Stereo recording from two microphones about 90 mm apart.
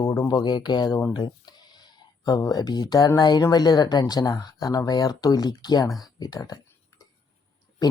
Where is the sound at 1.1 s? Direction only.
55° left (ahead or behind).